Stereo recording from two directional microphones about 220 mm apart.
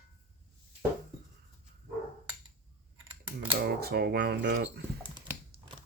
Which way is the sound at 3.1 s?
25° right (ahead or behind).